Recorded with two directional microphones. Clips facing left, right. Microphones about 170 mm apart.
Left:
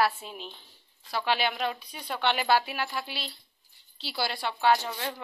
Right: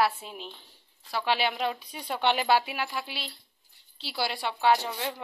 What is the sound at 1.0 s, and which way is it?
Speech, 5° left (ahead or behind).